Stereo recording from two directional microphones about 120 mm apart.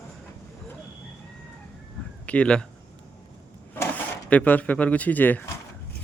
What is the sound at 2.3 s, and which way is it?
Speech, 10° left (ahead or behind).